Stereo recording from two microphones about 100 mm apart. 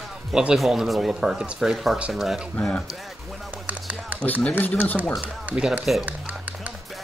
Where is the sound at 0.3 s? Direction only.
5° right (ahead or behind).